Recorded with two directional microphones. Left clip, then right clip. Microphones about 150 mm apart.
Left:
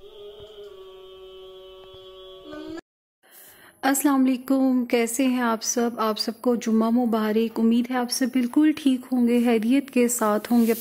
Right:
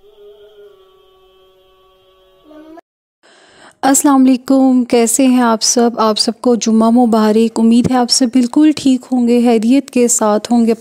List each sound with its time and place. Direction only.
3.8 s speech: 70° right (ahead or behind); by 6.7 s 55° right (ahead or behind)
7.1 s a woman's voice: 65° right (ahead or behind); by 10.5 s 45° right (ahead or behind)